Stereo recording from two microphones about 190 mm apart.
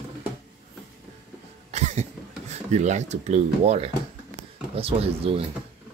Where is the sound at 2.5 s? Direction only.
35° right (ahead or behind).